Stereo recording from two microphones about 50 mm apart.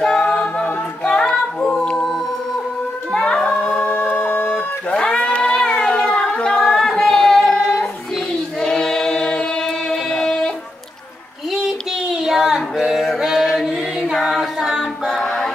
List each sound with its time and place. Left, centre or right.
0.2 s a capella: left
3.1 s a sound: centre
3.8 s music: left
4.9 s music: centre
5.2 s a sound: left
8.5 s choir: centre
12.3 s child singing: centre
13.2 s a sound: centre
14.6 s a capella: centre
15.2 s music: centre